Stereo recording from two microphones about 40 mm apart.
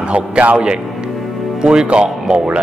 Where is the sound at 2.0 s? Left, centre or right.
Centre.